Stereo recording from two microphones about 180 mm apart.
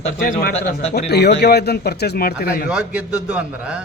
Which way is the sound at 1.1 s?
65° left (ahead or behind).